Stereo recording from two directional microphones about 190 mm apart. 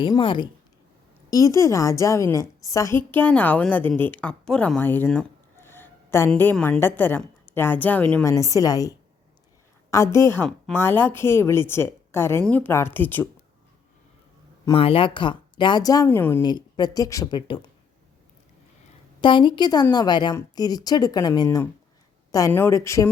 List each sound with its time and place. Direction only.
0.0 s a woman's voice: 25° left (ahead or behind); by 13.2 s 10° left (ahead or behind)
14.6 s a woman's voice: 25° left (ahead or behind); by 16.4 s 10° left (ahead or behind)
16.4 s a woman's voice: 25° left (ahead or behind)
19.2 s a woman's voice: 25° left (ahead or behind)